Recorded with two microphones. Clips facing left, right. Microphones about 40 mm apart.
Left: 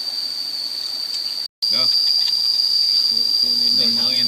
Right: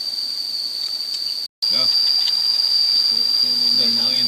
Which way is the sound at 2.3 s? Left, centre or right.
Centre.